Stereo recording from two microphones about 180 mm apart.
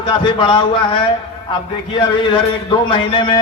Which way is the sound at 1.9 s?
25° left (ahead or behind).